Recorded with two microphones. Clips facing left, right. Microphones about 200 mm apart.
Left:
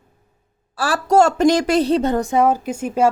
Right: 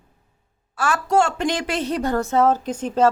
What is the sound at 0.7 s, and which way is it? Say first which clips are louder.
A woman's voice: left 4 dB; 35° left (ahead or behind).